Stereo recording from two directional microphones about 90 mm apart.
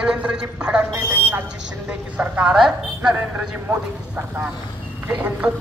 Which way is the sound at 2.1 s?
10° right (ahead or behind).